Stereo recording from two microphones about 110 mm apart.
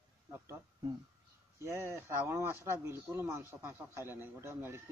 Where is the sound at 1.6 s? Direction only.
25° right (ahead or behind).